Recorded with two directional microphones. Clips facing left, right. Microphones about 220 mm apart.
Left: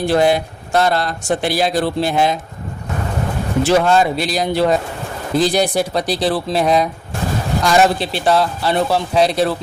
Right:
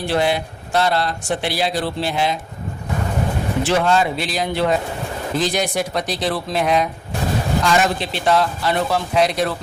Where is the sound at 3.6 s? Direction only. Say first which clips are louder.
Left 4 dB; 40° left (ahead or behind).